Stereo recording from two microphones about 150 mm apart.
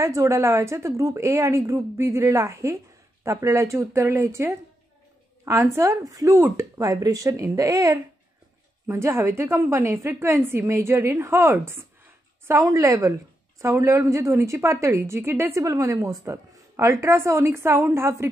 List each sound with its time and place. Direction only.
0.0 s a woman's voice: 20° right (ahead or behind)